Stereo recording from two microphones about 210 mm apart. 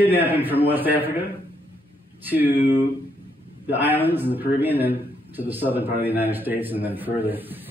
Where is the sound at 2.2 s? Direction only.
10° right (ahead or behind).